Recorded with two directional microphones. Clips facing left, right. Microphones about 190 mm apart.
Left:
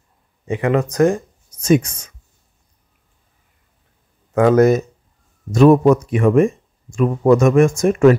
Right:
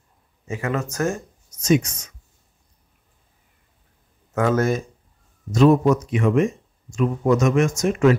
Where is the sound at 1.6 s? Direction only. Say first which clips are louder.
Left 4 dB; 55° left (ahead or behind).